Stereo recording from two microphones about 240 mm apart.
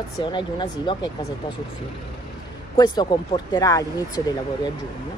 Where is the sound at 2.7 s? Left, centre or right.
Centre.